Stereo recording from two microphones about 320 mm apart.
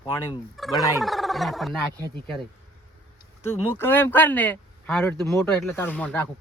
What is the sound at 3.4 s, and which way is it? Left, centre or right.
Speech, centre.